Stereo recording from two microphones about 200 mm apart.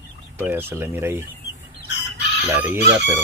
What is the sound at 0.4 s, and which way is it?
Speech, 10° right (ahead or behind).